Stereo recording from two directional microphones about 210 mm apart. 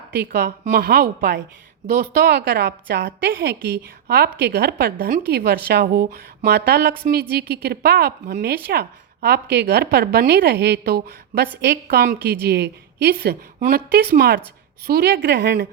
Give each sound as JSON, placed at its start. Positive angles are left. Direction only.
{"t": 0.2, "sound": "a woman's voice", "side_deg": -45}